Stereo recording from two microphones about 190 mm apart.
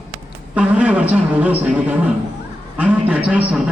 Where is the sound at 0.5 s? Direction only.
5° right (ahead or behind).